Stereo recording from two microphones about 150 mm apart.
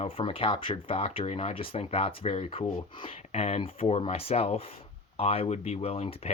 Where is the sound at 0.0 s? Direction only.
35° left (ahead or behind).